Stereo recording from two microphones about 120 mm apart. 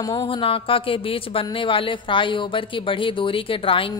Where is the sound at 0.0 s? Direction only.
40° left (ahead or behind).